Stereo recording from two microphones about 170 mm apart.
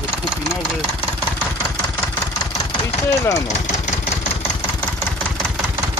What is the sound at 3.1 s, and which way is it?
Speech, 15° left (ahead or behind).